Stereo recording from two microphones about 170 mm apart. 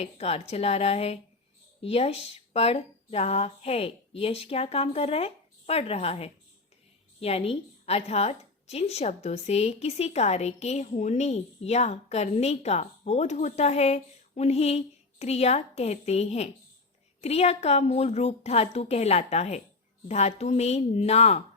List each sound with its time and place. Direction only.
0.0 s a woman's voice: 35° left (ahead or behind)